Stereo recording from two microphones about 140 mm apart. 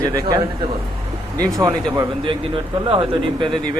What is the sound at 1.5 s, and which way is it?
Speech, 25° right (ahead or behind).